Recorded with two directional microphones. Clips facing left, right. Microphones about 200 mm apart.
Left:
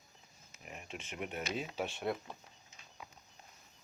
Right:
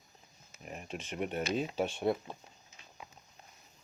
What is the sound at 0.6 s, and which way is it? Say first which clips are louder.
Speech: right 5 dB; 40° right (ahead or behind).